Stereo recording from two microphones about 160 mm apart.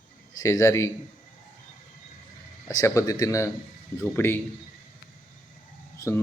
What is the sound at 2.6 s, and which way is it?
A man's voice, 20° left (ahead or behind).